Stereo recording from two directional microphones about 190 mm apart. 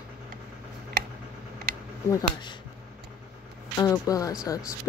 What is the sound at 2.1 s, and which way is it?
Speech, 20° left (ahead or behind).